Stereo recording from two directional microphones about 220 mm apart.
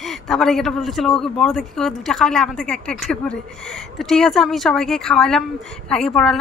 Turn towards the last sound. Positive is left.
turn(degrees=5)  # may be behind; listen again after turning